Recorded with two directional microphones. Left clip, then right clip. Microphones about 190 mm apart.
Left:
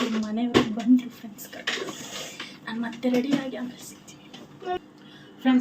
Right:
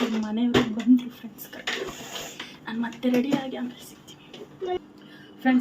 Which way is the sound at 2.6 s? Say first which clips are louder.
Right 1 dB; 10° right (ahead or behind).